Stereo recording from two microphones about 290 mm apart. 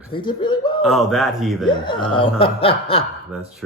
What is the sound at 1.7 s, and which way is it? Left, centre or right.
Speech, centre.